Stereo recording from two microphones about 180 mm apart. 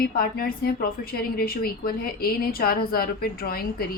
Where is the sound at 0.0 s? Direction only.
55° left (ahead or behind).